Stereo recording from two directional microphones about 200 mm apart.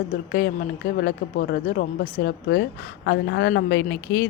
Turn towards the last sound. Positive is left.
turn(degrees=50)  # may be behind; listen again after turning